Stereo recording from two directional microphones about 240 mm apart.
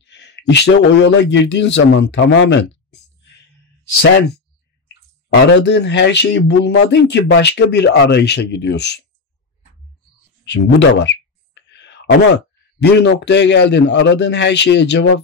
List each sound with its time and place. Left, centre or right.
0.0 s a man's voice: left
5.3 s speech: left
10.4 s a sound: left
12.8 s speech: left